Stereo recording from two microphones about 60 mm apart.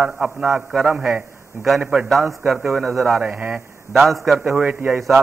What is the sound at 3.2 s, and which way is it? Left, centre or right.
Speech, right.